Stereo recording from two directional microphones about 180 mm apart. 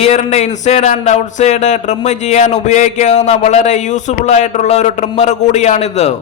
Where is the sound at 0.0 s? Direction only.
40° left (ahead or behind).